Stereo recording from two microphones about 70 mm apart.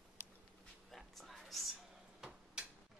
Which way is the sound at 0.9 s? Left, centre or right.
Centre.